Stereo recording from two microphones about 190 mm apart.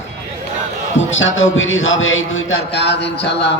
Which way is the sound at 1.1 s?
90° left.